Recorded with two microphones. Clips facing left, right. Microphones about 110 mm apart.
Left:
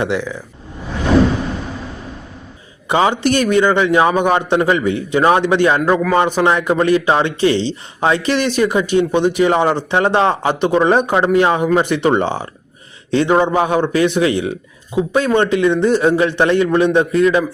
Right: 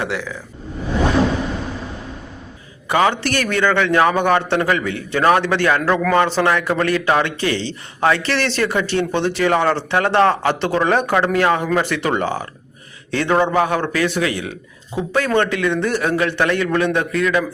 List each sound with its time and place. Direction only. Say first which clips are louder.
0.0 s a man's voice: left 5 dB; 20° left (ahead or behind)
2.9 s a man's voice: left 3 dB; 20° left (ahead or behind)